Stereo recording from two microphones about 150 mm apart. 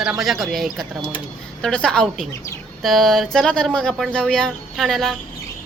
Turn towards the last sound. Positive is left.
turn(degrees=0)  # may be behind; listen again after turning